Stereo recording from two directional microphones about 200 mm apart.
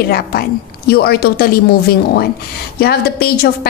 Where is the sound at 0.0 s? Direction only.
50° left (ahead or behind).